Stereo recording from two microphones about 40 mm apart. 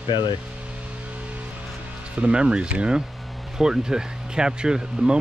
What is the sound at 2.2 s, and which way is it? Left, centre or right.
Speech, right.